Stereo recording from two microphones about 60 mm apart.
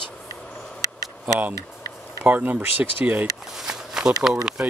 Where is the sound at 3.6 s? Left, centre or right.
Centre.